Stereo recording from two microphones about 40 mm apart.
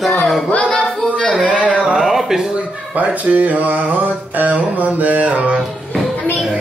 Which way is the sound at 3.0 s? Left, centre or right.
Right.